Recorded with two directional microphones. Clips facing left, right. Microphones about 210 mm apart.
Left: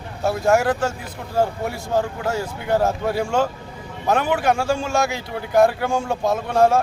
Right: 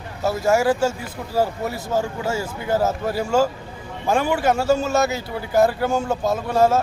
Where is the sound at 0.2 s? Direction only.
5° right (ahead or behind).